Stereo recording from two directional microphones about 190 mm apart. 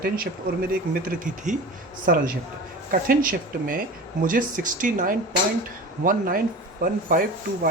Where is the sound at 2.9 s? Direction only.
45° right (ahead or behind).